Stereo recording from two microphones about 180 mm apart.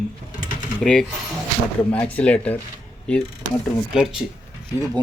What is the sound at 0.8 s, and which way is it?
Speech, centre (ahead or behind).